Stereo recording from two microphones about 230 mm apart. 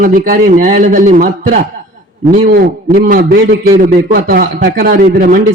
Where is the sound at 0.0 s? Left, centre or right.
Right.